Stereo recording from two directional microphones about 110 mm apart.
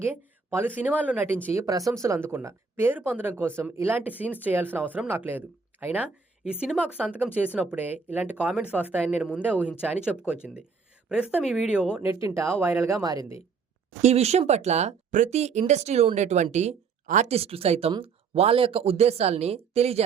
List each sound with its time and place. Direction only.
0.0 s speech: 20° right (ahead or behind)
1.6 s speech: 30° right (ahead or behind); by 11.9 s 10° right (ahead or behind)
12.0 s speech: 25° right (ahead or behind)
13.0 s speech: 35° right (ahead or behind)
14.0 s a woman's voice: 75° right (ahead or behind)
17.2 s speech: 70° right (ahead or behind)